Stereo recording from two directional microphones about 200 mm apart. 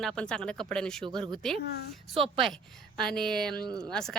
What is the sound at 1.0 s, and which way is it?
Speech, 25° right (ahead or behind).